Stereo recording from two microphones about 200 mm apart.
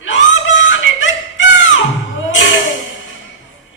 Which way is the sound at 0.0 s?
65° left (ahead or behind).